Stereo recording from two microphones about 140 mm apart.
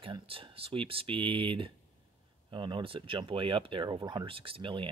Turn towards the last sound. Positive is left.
turn(degrees=-35)  # may be behind; listen again after turning